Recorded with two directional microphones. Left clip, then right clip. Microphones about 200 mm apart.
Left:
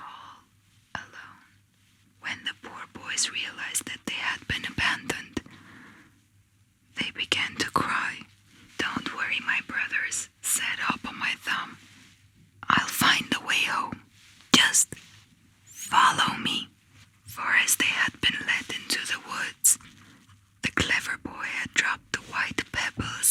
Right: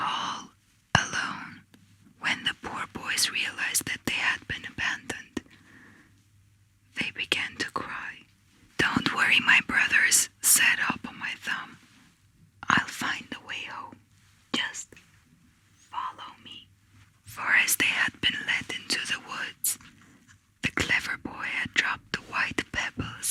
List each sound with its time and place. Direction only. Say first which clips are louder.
0.0 s whispering: right 14 dB; 70° right (ahead or behind)
2.2 s whispering: right 5 dB; 30° right (ahead or behind); by 4.4 s 10° right (ahead or behind)
4.4 s whispering: left 4 dB; 15° left (ahead or behind)
7.8 s whispering: left 8 dB; 25° left (ahead or behind)
8.7 s whispering: right 5 dB; 20° right (ahead or behind)
11.0 s whispering: left 4 dB; 10° left (ahead or behind)
12.5 s whispering: left 1 dB; 5° right (ahead or behind)
13.0 s whispering: left 9 dB; 20° left (ahead or behind)
13.2 s whispering: left 11 dB; 35° left (ahead or behind)
15.9 s whispering: left 15 dB; 60° left (ahead or behind)
17.3 s whispering: even; 5° right (ahead or behind)
20.6 s whispering: left 1 dB; 5° right (ahead or behind)